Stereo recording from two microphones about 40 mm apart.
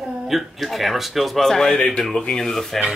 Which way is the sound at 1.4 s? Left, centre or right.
Centre.